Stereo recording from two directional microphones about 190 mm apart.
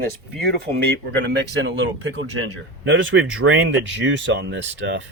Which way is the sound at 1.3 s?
65° right (ahead or behind).